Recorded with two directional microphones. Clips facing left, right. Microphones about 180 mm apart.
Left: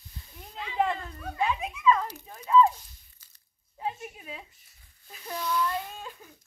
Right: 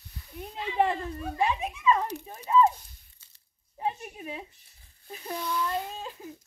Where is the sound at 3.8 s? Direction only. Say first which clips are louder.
Right 3 dB; 25° right (ahead or behind).